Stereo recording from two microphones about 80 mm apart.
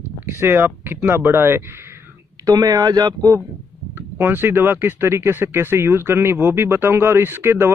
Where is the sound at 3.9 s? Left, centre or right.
Right.